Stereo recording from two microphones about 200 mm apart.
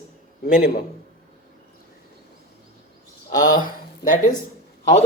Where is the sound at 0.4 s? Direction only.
50° left (ahead or behind).